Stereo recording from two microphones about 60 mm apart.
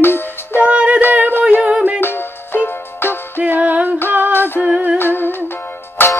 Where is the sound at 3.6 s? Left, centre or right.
Right.